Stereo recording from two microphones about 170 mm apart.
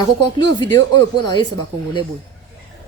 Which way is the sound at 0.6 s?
25° left (ahead or behind).